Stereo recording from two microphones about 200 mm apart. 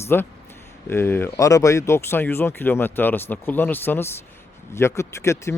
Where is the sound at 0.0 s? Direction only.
10° left (ahead or behind).